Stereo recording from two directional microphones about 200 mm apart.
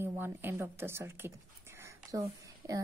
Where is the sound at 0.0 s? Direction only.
10° right (ahead or behind).